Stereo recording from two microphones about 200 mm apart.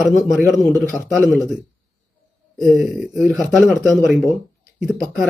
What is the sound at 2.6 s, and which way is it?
Speech, centre (ahead or behind).